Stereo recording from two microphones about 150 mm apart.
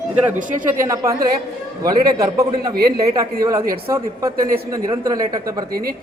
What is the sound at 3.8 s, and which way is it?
A man's voice, 20° right (ahead or behind).